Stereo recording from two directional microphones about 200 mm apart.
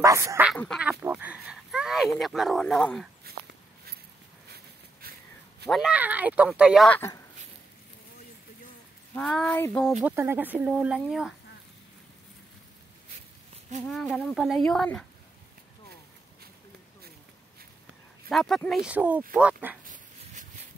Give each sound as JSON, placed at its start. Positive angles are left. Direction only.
{"t": 0.0, "sound": "speech", "side_deg": -15}
{"t": 5.0, "sound": "a sound", "side_deg": -50}
{"t": 5.7, "sound": "speech", "side_deg": -5}
{"t": 9.1, "sound": "speech", "side_deg": 5}
{"t": 10.0, "sound": "speech", "side_deg": -10}
{"t": 13.8, "sound": "speech", "side_deg": 0}
{"t": 18.3, "sound": "speech", "side_deg": 0}
{"t": 19.8, "sound": "dog", "side_deg": -40}